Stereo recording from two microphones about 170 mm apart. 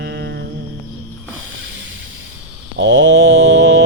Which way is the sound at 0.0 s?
90° right.